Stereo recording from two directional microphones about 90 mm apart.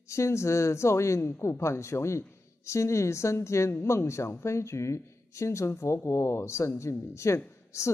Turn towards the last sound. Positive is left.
turn(degrees=30)  # may be behind; listen again after turning